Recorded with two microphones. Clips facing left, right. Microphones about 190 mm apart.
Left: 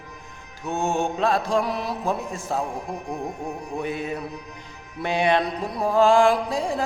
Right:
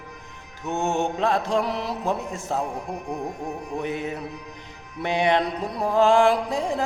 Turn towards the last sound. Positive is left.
turn(degrees=-20)  # may be behind; listen again after turning